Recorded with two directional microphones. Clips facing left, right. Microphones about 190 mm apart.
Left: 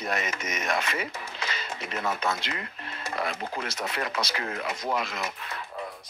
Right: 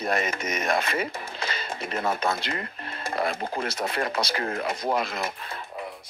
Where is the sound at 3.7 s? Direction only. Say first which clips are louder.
Right 4 dB; 30° right (ahead or behind).